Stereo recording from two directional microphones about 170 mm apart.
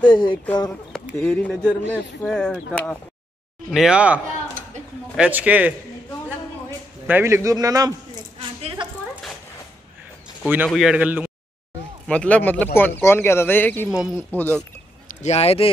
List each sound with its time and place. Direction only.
0.0 s speech: 25° left (ahead or behind)
1.1 s a man's voice: 10° left (ahead or behind); by 5.8 s 10° right (ahead or behind)
7.1 s a man's voice: 15° right (ahead or behind)
8.4 s a sound: 30° right (ahead or behind)
10.4 s a man's voice: 10° right (ahead or behind)
12.1 s speech: 5° left (ahead or behind)
13.8 s speech: 5° right (ahead or behind)
14.3 s speech: 10° left (ahead or behind)
15.0 s speech: 40° left (ahead or behind)